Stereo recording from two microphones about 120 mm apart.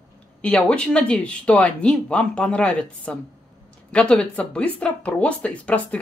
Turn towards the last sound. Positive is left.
turn(degrees=10)  # may be behind; listen again after turning